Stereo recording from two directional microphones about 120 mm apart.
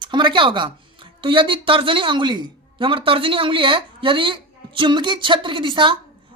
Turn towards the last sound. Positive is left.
turn(degrees=-45)  # may be behind; listen again after turning